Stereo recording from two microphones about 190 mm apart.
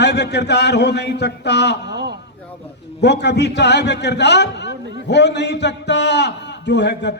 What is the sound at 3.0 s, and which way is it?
A man's voice, 65° left (ahead or behind).